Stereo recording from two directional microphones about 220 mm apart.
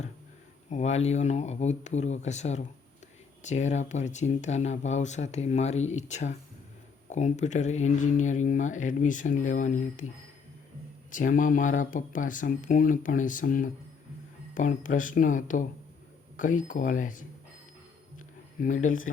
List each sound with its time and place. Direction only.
0.7 s speech: 30° left (ahead or behind)
11.1 s speech: 35° left (ahead or behind)
18.6 s speech: 35° left (ahead or behind)